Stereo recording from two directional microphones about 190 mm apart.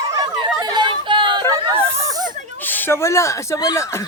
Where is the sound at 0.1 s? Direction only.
20° right (ahead or behind).